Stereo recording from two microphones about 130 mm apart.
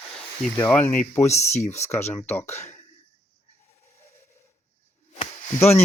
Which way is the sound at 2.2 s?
15° left (ahead or behind).